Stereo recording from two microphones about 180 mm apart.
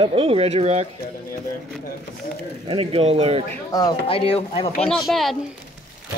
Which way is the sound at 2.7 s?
30° right (ahead or behind).